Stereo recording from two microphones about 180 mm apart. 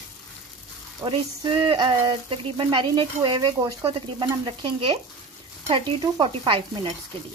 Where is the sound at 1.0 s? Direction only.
30° right (ahead or behind).